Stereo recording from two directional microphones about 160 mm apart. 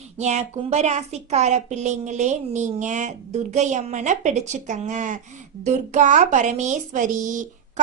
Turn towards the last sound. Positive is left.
turn(degrees=-50)  # may be behind; listen again after turning